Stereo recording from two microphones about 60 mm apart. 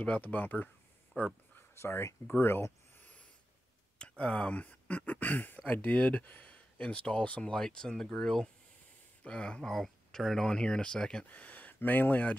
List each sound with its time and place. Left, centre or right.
0.0 s speech: left
1.1 s a sound: left
1.8 s speech: left
2.2 s speech: left
3.0 s a sound: left
4.2 s speech: centre
9.7 s speech: centre
11.2 s speech: left